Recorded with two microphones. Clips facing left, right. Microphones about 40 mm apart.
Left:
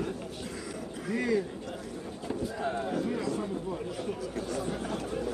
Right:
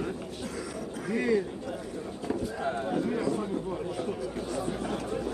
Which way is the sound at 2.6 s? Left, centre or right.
Centre.